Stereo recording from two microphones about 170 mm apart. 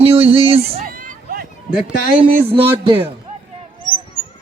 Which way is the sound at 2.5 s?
30° right (ahead or behind).